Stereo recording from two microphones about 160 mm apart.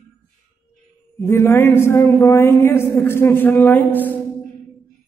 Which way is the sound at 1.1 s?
15° left (ahead or behind).